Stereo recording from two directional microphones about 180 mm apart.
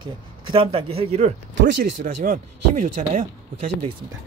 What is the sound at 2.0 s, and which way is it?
Speech, 50° right (ahead or behind).